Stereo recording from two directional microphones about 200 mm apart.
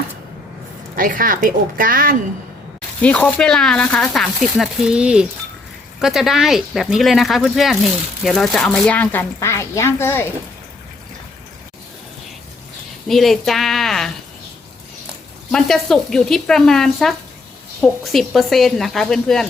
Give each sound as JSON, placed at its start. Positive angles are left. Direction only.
{"t": 0.9, "sound": "a woman's voice", "side_deg": -45}
{"t": 3.0, "sound": "speech", "side_deg": 5}
{"t": 13.1, "sound": "speech", "side_deg": 0}
{"t": 15.5, "sound": "speech", "side_deg": 5}